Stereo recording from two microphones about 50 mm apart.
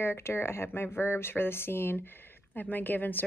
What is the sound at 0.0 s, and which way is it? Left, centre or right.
Speech, left.